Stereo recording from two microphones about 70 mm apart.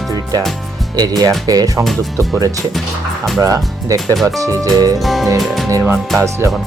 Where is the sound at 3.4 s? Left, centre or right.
Right.